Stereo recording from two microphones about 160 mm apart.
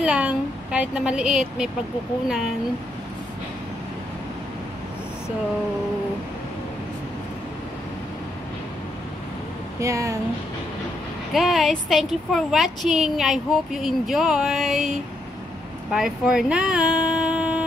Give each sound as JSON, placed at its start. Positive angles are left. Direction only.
{"t": 0.0, "sound": "a woman's voice", "side_deg": -10}
{"t": 9.8, "sound": "speech", "side_deg": -20}
{"t": 11.3, "sound": "a woman's voice", "side_deg": 0}